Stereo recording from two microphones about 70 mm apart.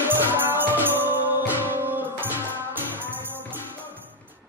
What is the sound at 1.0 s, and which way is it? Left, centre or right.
Music, right.